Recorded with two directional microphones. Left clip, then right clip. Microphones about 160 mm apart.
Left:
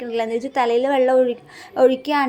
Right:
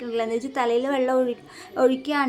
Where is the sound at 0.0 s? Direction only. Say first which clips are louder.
Left 3 dB; 20° left (ahead or behind).